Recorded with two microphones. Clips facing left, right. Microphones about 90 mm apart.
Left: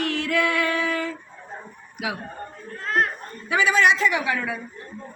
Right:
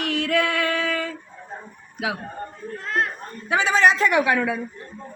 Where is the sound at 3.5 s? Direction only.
30° right (ahead or behind).